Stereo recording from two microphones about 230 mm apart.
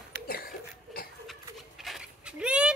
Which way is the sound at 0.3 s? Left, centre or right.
Left.